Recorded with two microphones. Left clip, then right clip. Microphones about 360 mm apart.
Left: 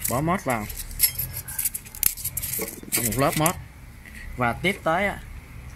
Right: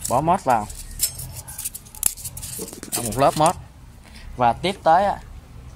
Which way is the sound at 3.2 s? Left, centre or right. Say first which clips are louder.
Right 7 dB; right.